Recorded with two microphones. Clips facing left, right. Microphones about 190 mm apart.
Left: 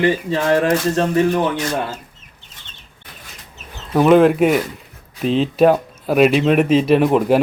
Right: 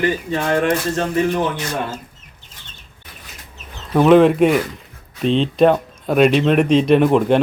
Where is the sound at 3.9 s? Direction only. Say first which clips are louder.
Even; 5° left (ahead or behind).